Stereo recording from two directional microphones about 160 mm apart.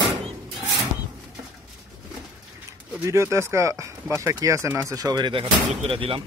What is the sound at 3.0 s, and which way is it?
Speech, 15° right (ahead or behind).